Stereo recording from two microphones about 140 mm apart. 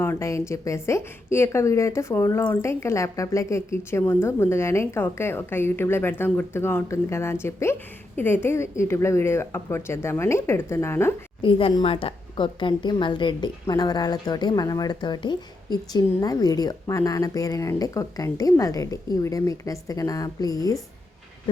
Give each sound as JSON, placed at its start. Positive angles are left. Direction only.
{"t": 0.0, "sound": "a woman's voice", "side_deg": 20}
{"t": 11.4, "sound": "a woman's voice", "side_deg": 40}